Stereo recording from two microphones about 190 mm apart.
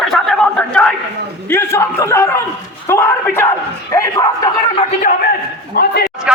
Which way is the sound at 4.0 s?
20° left (ahead or behind).